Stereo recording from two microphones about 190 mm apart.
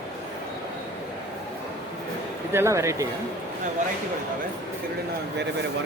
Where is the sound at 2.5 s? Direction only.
15° right (ahead or behind).